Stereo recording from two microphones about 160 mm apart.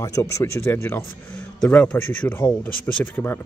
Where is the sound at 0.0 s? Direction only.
20° left (ahead or behind).